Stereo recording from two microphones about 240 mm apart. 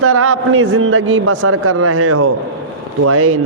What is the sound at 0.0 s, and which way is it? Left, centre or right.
A man's voice, right.